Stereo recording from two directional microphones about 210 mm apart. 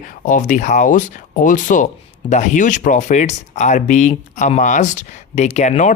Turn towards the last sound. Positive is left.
turn(degrees=35)  # may be behind; listen again after turning